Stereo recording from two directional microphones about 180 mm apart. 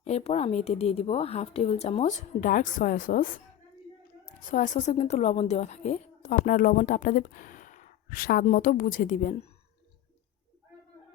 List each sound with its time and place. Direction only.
0.0 s a woman's voice: 35° left (ahead or behind)
4.5 s a woman's voice: 45° left (ahead or behind)